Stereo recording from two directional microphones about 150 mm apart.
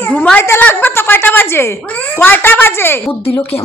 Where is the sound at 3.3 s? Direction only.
40° left (ahead or behind).